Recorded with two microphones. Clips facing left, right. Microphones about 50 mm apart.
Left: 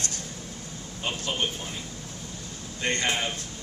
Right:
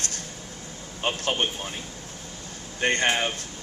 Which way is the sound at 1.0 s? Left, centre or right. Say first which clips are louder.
Right 4 dB; right.